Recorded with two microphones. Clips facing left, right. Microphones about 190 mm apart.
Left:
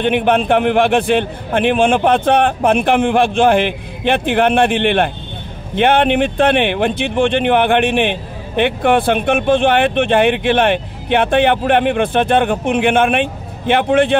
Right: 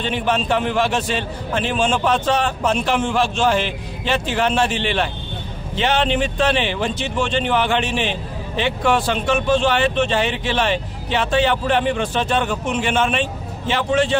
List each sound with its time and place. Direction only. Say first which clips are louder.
0.0 s speech: left 7 dB; 60° left (ahead or behind)